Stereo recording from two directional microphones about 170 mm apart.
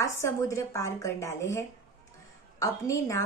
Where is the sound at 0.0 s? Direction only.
15° left (ahead or behind).